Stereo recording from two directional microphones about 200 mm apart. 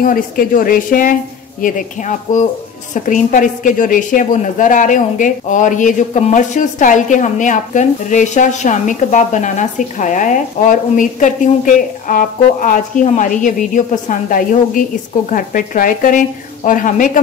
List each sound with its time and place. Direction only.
0.0 s a woman's voice: 45° left (ahead or behind)